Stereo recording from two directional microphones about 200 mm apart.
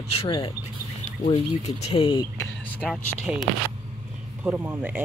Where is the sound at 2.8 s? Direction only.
Centre (ahead or behind).